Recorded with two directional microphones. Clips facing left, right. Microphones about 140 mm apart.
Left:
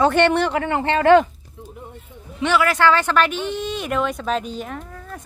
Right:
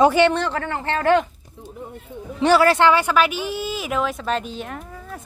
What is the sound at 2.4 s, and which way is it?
Speech, 35° right (ahead or behind).